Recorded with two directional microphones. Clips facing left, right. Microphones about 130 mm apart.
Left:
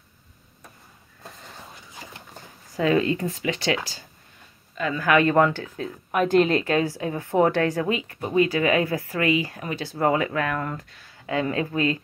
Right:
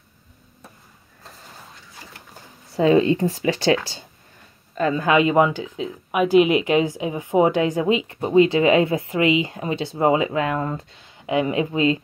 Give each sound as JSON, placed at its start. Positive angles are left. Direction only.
{"t": 2.7, "sound": "speech", "side_deg": -25}
{"t": 4.7, "sound": "speech", "side_deg": -35}
{"t": 5.0, "sound": "speech", "side_deg": -15}